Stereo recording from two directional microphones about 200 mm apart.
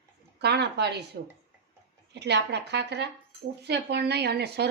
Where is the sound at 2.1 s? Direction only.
60° right (ahead or behind).